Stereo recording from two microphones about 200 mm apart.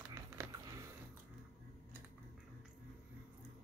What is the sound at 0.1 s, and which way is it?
Biting, 15° right (ahead or behind).